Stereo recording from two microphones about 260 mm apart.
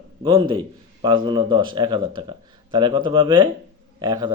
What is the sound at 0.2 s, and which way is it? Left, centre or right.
A man's voice, centre.